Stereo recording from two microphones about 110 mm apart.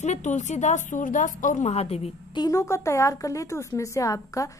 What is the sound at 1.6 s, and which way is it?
Speech, 70° left (ahead or behind).